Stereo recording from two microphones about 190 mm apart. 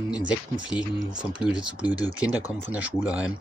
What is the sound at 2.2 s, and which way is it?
Speech, 5° right (ahead or behind).